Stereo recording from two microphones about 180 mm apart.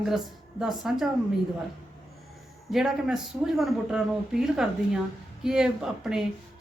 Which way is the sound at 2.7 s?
Centre (ahead or behind).